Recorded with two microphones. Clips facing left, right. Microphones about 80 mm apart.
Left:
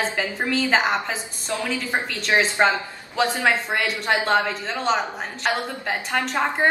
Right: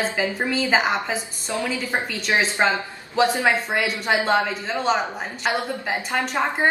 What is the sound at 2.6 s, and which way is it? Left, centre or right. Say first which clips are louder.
A woman's voice: left 1 dB; centre.